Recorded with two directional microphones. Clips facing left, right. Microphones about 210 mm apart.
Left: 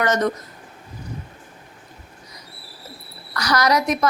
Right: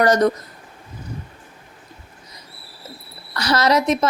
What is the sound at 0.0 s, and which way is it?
Speech, 35° right (ahead or behind).